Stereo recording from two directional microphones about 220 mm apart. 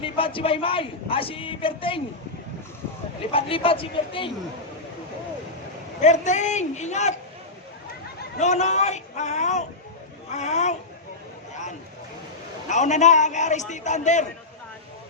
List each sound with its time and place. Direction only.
0.0 s speech: 25° left (ahead or behind)
3.3 s speech: 25° left (ahead or behind)
6.0 s a man's voice: 30° left (ahead or behind)
8.4 s a man's voice: 30° left (ahead or behind)
12.6 s a man's voice: 35° left (ahead or behind)